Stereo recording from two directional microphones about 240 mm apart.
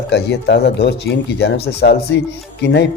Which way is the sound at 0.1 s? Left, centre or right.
Left.